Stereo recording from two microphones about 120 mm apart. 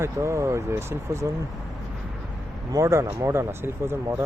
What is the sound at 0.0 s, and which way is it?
Speech, 25° right (ahead or behind).